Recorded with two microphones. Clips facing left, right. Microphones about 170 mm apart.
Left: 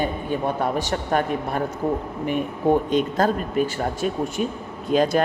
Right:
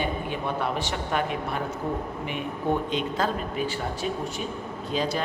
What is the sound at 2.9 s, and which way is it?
A man's voice, 45° left (ahead or behind).